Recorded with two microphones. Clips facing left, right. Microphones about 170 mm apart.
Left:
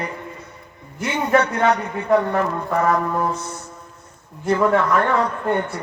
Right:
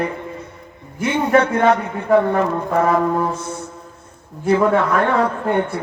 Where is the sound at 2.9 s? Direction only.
25° right (ahead or behind).